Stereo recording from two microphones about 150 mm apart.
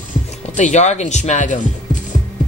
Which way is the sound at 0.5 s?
50° left (ahead or behind).